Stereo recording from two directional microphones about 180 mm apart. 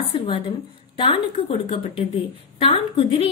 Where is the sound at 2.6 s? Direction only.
30° left (ahead or behind).